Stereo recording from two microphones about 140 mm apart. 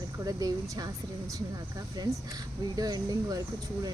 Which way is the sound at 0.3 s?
25° right (ahead or behind).